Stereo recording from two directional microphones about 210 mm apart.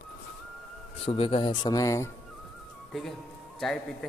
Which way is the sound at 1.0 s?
25° left (ahead or behind).